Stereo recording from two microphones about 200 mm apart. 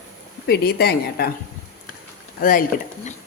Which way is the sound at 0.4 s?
50° left (ahead or behind).